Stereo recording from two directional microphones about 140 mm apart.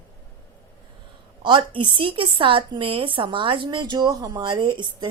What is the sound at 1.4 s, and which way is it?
A woman's voice, 35° right (ahead or behind).